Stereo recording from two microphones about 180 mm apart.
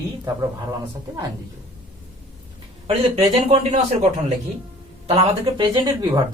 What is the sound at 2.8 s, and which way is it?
Speech, 35° right (ahead or behind).